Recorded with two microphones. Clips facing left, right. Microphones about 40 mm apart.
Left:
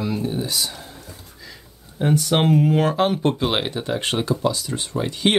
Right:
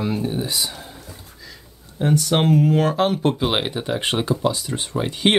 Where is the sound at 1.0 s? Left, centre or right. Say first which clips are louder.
Even; centre.